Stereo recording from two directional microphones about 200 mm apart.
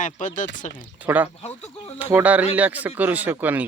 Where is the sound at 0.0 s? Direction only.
40° left (ahead or behind).